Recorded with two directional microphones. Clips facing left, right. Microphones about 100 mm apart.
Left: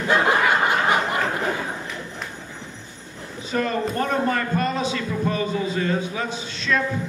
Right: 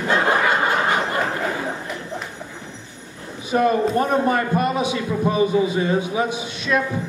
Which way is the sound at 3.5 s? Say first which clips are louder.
Right 6 dB; 15° right (ahead or behind).